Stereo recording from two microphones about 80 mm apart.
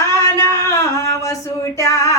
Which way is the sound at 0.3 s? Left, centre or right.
Left.